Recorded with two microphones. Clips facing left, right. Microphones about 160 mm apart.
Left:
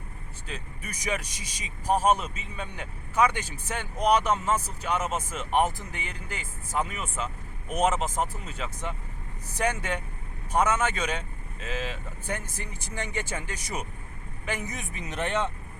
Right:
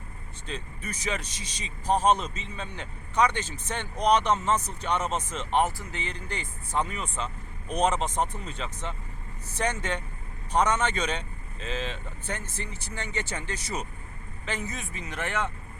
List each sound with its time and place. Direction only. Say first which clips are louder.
0.4 s a man's voice: right 3 dB; 10° left (ahead or behind)